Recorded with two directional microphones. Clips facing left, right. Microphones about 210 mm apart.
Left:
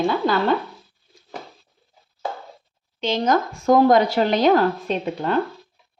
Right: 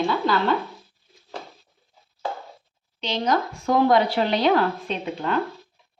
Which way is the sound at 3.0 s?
45° left (ahead or behind).